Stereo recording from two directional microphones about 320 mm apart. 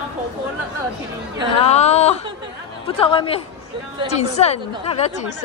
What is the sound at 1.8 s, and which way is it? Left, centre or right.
A woman's voice, centre.